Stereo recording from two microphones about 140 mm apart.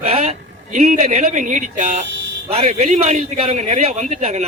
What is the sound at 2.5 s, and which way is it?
A man's voice, 45° right (ahead or behind).